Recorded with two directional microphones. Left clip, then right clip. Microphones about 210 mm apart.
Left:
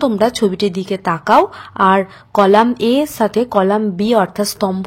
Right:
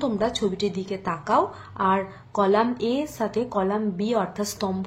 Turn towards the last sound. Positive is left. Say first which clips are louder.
# left 10 dB
turn(degrees=40)  # may be behind; listen again after turning